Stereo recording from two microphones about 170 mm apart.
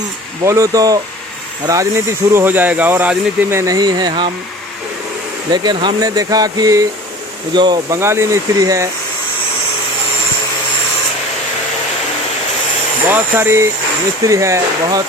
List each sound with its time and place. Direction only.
0.4 s speech: 20° right (ahead or behind)
5.5 s speech: 25° right (ahead or behind)
13.1 s speech: 10° right (ahead or behind)